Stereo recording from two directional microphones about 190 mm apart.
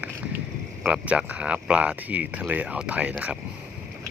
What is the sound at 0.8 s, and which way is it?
Speech, 5° right (ahead or behind).